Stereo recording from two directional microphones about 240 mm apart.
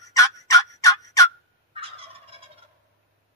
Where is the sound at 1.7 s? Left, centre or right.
Right.